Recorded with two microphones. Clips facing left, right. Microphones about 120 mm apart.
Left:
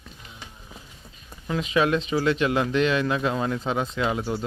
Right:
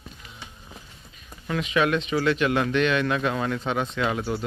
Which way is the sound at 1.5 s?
25° left (ahead or behind).